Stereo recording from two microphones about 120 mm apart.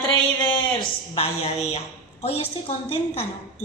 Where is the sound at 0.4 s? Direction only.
45° left (ahead or behind).